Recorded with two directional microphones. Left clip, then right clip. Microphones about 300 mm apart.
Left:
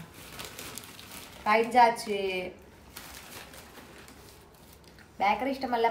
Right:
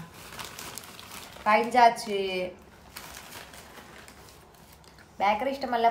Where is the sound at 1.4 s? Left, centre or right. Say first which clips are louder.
Right 2 dB; centre.